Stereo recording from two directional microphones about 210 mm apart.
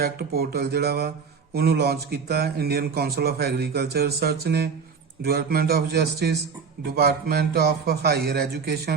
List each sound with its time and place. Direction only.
0.0 s speech: 45° right (ahead or behind)